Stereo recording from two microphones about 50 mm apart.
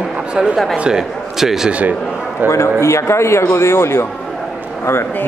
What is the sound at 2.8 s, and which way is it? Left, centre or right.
Speech, left.